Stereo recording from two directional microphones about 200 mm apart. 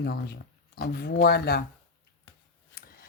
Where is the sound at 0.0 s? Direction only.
55° left (ahead or behind).